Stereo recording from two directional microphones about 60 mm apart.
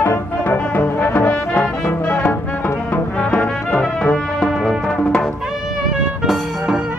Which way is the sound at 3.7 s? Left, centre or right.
Centre.